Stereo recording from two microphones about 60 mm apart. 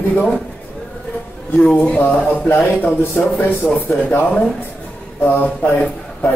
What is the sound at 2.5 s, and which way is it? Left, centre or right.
Speech, left.